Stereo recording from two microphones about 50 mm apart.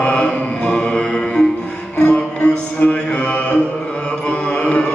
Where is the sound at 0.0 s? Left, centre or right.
Left.